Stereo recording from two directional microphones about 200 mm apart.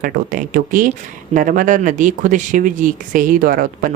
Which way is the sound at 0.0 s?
45° right (ahead or behind).